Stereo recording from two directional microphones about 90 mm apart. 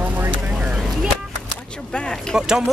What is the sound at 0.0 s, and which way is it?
Vehicle, 20° right (ahead or behind).